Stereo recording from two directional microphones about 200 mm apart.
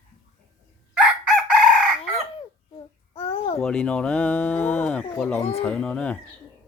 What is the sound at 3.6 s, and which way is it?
Speech, 5° left (ahead or behind).